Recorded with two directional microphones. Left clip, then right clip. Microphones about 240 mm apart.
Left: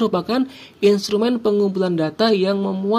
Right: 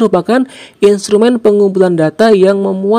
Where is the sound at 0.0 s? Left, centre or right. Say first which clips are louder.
Right 9 dB; right.